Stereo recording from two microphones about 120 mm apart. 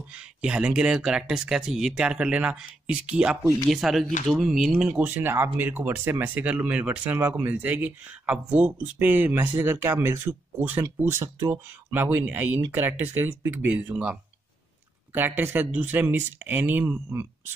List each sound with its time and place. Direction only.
0.1 s speech: 10° right (ahead or behind)
15.1 s speech: 15° right (ahead or behind)